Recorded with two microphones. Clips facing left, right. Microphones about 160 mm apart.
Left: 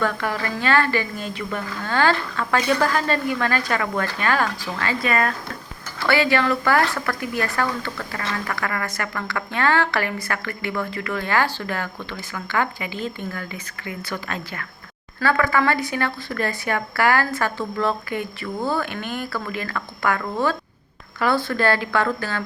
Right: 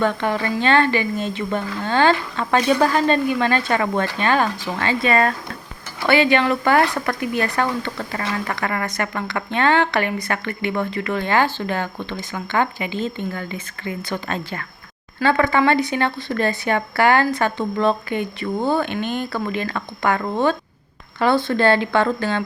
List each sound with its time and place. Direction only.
0.0 s a woman's voice: 25° right (ahead or behind)